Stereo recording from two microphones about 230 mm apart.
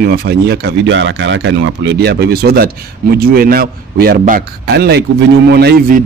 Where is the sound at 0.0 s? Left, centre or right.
Right.